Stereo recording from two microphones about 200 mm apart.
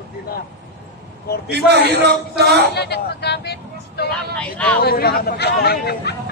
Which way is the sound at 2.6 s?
55° left (ahead or behind).